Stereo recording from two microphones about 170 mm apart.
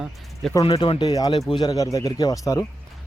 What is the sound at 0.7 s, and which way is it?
Speech, 25° left (ahead or behind).